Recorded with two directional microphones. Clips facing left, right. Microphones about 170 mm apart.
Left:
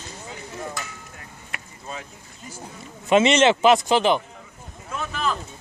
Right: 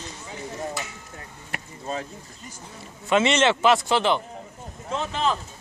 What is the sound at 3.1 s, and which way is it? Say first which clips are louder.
Speech: left 3 dB; 20° left (ahead or behind).